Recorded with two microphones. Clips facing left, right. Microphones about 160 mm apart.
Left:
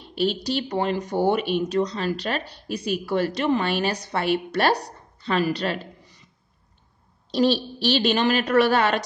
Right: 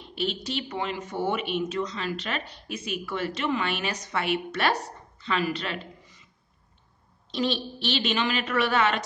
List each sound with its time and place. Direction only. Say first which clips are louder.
0.1 s speech: left 6 dB; 35° left (ahead or behind)
7.2 s speech: left 7 dB; 35° left (ahead or behind)